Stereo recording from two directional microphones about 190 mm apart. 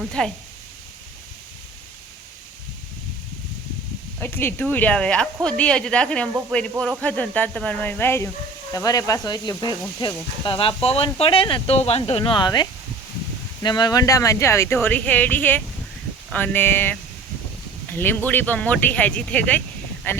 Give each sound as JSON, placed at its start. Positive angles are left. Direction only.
{"t": 0.2, "sound": "speech", "side_deg": 5}
{"t": 4.2, "sound": "speech", "side_deg": 10}